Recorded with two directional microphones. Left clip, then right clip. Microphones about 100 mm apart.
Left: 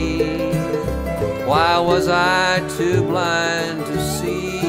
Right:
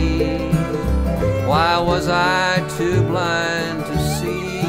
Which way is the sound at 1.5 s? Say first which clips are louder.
Left 2 dB; 15° left (ahead or behind).